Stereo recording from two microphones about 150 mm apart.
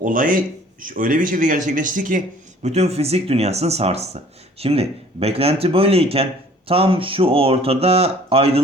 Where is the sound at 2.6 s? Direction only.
45° right (ahead or behind).